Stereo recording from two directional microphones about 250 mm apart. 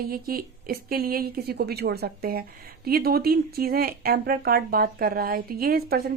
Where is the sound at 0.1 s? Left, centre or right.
Right.